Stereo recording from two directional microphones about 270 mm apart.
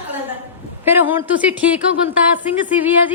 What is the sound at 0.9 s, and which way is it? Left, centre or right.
Speech, centre.